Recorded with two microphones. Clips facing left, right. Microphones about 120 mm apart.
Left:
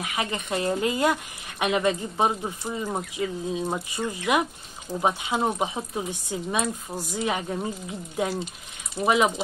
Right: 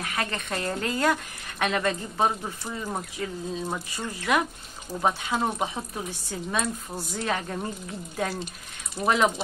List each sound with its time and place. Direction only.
0.0 s speech: 15° left (ahead or behind)